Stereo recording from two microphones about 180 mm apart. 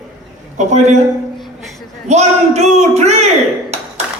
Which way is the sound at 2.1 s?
40° right (ahead or behind).